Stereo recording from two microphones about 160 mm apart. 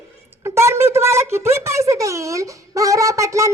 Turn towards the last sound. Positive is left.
turn(degrees=-20)  # may be behind; listen again after turning